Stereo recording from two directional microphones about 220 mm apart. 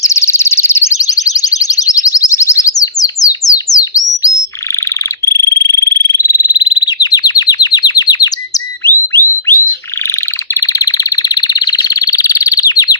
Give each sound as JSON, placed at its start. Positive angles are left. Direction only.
{"t": 0.0, "sound": "alarm", "side_deg": 10}
{"t": 4.7, "sound": "frog", "side_deg": 15}